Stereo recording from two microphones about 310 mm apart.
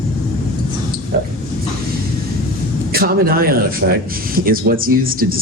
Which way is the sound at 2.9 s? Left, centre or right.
Right.